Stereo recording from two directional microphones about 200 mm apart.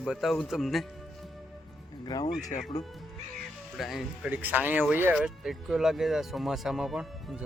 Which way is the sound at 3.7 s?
Centre (ahead or behind).